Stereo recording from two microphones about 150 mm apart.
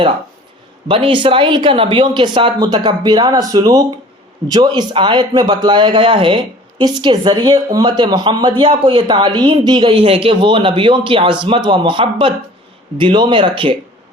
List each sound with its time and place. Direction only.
0.9 s a man's voice: 35° right (ahead or behind)